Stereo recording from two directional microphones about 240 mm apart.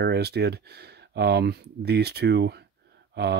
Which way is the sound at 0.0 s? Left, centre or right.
Right.